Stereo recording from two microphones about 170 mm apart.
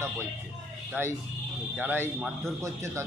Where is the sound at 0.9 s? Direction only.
15° right (ahead or behind).